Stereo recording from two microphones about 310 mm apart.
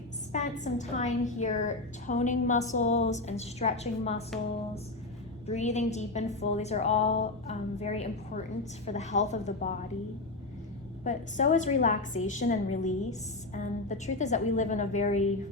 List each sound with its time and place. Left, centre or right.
0.3 s a woman's voice: left
5.5 s a woman's voice: left
11.0 s a woman's voice: left